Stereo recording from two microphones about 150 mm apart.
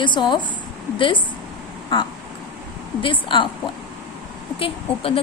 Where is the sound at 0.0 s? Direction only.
30° left (ahead or behind).